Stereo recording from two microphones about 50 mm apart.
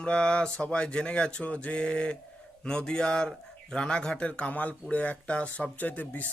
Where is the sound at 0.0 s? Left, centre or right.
Left.